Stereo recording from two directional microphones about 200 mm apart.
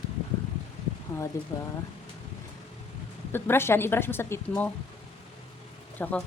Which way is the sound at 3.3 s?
10° left (ahead or behind).